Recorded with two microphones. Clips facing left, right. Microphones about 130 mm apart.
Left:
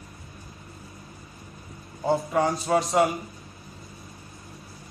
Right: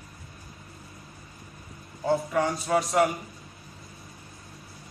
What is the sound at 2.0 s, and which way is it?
A man's voice, 25° left (ahead or behind).